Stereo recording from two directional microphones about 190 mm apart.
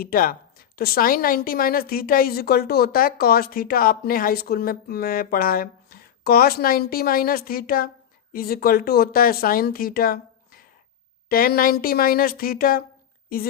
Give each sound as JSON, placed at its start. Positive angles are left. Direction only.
{"t": 0.0, "sound": "a woman's voice", "side_deg": 50}